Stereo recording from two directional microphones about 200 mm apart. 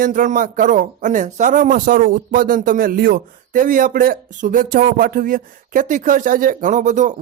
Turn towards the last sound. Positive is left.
turn(degrees=-40)  # may be behind; listen again after turning